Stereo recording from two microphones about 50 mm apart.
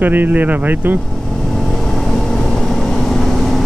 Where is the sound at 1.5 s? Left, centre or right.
Centre.